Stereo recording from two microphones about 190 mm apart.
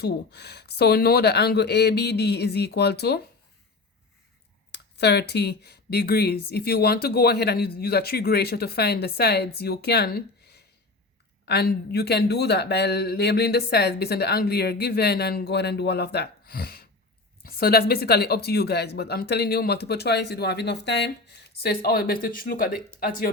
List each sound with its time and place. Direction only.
0.0 s speech: 60° left (ahead or behind)
4.7 s speech: 60° left (ahead or behind)